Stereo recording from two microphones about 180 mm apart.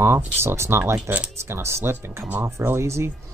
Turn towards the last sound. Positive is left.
turn(degrees=-15)  # may be behind; listen again after turning